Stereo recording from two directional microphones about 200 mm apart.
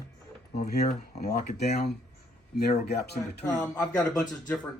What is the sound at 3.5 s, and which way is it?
Speech, 5° left (ahead or behind).